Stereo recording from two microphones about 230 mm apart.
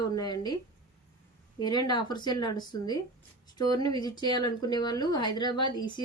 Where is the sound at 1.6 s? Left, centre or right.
Centre.